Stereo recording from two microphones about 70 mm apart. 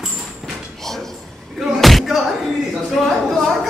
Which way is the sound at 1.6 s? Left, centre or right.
Centre.